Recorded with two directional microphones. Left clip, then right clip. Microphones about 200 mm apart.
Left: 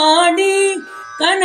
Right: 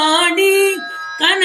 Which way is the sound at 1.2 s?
25° left (ahead or behind).